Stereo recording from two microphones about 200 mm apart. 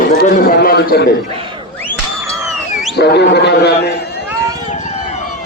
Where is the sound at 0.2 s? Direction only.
50° left (ahead or behind).